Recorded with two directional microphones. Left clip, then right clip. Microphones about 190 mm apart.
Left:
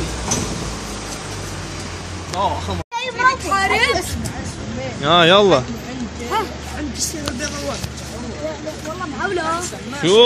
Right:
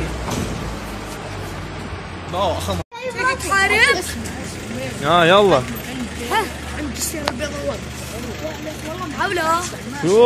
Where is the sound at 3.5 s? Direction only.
Centre (ahead or behind).